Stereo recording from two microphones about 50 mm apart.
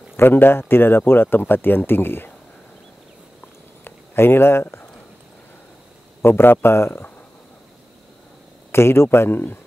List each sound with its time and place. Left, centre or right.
0.2 s speech: left
3.8 s speech: left
6.2 s speech: left
8.7 s speech: left